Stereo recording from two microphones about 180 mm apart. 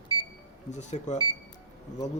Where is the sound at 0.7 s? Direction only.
40° left (ahead or behind).